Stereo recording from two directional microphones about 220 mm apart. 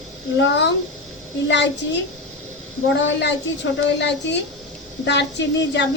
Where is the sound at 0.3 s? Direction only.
50° left (ahead or behind).